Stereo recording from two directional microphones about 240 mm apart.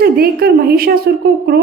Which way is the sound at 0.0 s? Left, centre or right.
Right.